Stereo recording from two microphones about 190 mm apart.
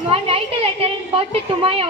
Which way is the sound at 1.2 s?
30° right (ahead or behind).